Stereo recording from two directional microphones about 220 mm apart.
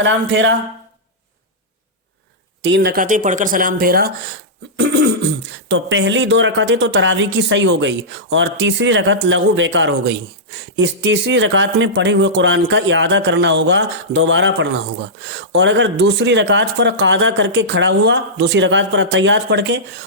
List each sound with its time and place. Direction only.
0.0 s speech: 55° right (ahead or behind)
2.6 s speech: 50° right (ahead or behind)